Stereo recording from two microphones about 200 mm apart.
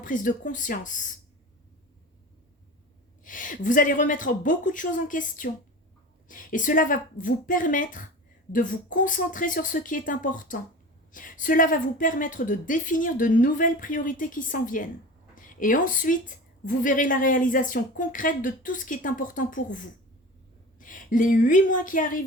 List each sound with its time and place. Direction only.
0.0 s a woman's voice: 40° left (ahead or behind)
3.2 s a woman's voice: 40° left (ahead or behind)